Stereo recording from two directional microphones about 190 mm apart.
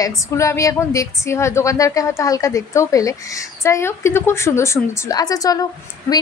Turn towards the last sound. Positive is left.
turn(degrees=20)  # may be behind; listen again after turning